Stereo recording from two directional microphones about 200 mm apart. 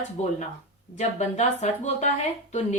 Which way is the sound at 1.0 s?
35° left (ahead or behind).